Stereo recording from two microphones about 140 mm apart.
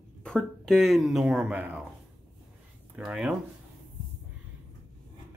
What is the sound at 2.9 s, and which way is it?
Speech, 5° right (ahead or behind).